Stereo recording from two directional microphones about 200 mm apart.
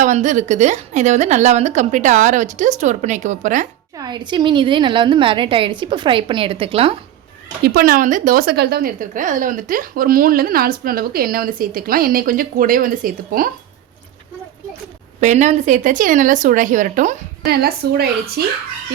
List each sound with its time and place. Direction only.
0.0 s a woman's voice: 40° right (ahead or behind)
3.9 s a woman's voice: 20° right (ahead or behind)
7.6 s a woman's voice: 50° right (ahead or behind)
15.2 s a woman's voice: 35° right (ahead or behind)